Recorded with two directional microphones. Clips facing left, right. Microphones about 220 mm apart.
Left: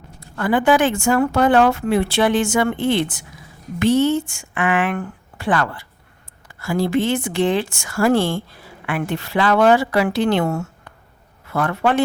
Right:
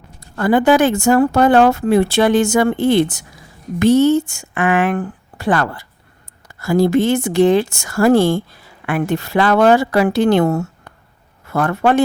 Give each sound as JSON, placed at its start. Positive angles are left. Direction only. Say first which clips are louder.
{"t": 0.2, "sound": "speech", "louder": "right 4 dB", "side_deg": -40}